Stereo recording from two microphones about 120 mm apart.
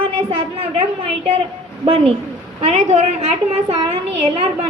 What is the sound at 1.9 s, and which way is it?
A woman's voice, 55° right (ahead or behind).